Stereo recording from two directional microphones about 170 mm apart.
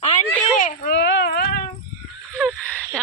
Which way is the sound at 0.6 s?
55° left (ahead or behind).